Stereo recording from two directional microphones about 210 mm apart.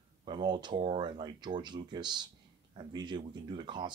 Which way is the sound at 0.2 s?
20° right (ahead or behind).